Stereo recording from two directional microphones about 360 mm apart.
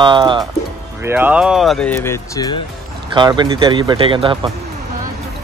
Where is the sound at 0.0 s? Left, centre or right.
Centre.